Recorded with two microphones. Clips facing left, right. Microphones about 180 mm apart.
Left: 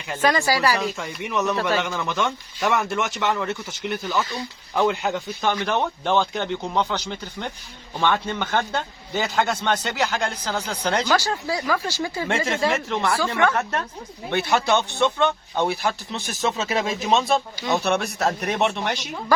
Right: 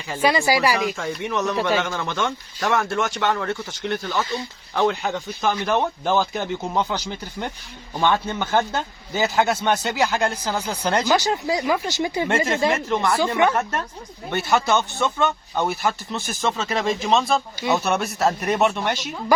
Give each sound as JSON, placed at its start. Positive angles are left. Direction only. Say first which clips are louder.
{"t": 0.2, "sound": "a man's voice", "louder": "right 2 dB", "side_deg": -10}
{"t": 0.9, "sound": "a man's voice", "louder": "right 1 dB", "side_deg": 0}
{"t": 12.5, "sound": "speech", "louder": "right 2 dB", "side_deg": 0}
{"t": 13.1, "sound": "speech", "louder": "right 2 dB", "side_deg": -20}
{"t": 13.5, "sound": "speech", "louder": "right 1 dB", "side_deg": 0}